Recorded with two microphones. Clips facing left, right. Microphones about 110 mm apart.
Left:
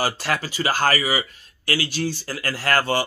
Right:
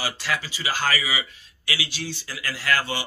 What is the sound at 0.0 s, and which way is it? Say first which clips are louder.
Speech: left 5 dB; 45° left (ahead or behind).